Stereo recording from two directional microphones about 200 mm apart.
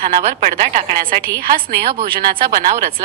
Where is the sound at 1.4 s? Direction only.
50° right (ahead or behind).